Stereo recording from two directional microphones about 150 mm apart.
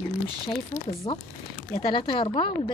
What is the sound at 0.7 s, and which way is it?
Speech, 65° left (ahead or behind).